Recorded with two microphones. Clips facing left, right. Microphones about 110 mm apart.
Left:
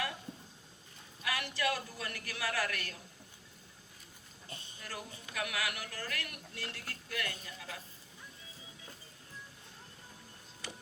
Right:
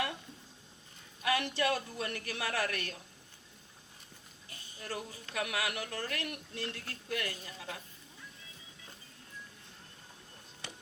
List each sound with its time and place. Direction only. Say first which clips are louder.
1.2 s a man's voice: right 4 dB; 30° right (ahead or behind)
4.4 s music: left 6 dB; 30° left (ahead or behind)
4.8 s a man's voice: right 6 dB; 30° right (ahead or behind)